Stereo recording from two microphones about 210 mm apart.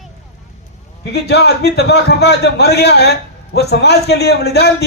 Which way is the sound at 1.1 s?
50° left (ahead or behind).